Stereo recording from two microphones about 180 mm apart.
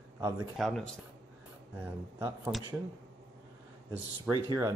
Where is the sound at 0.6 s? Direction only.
Centre (ahead or behind).